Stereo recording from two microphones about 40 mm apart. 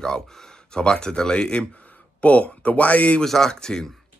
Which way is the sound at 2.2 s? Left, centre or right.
Left.